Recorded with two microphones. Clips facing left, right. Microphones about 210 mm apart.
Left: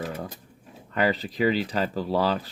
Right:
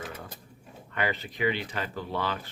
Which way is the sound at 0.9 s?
35° left (ahead or behind).